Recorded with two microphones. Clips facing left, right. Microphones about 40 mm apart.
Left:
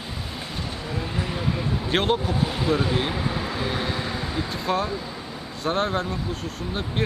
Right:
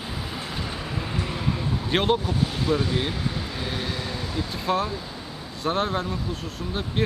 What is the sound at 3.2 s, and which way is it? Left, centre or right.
Vehicle, left.